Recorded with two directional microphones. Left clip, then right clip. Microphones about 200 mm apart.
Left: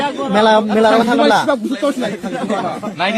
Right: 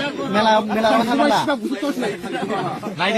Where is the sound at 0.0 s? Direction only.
35° left (ahead or behind).